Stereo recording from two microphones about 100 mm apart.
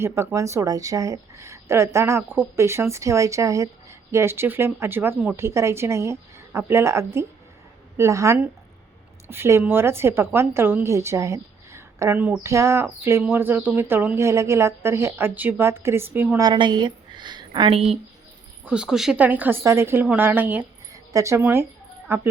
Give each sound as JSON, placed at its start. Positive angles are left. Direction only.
{"t": 0.0, "sound": "speech", "side_deg": -25}
{"t": 16.4, "sound": "a woman's voice", "side_deg": -50}
{"t": 17.7, "sound": "speech", "side_deg": -80}
{"t": 18.6, "sound": "speech", "side_deg": -10}
{"t": 19.2, "sound": "speech", "side_deg": -15}
{"t": 20.9, "sound": "a sound", "side_deg": -35}
{"t": 21.4, "sound": "a sound", "side_deg": -20}